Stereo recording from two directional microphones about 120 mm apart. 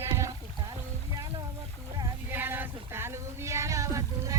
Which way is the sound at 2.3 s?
15° right (ahead or behind).